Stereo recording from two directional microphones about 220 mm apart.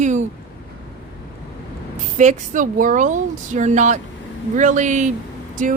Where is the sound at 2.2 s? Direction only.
35° right (ahead or behind).